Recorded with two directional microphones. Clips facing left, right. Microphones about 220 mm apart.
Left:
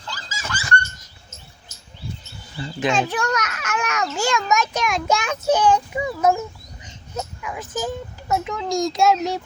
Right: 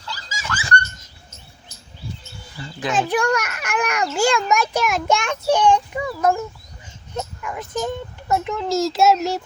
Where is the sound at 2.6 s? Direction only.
30° left (ahead or behind).